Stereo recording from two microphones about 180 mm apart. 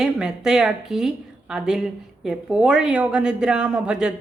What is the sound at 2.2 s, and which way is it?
Speech, 5° right (ahead or behind).